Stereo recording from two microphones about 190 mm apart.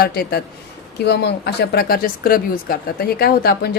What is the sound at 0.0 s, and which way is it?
A woman's voice, 55° left (ahead or behind).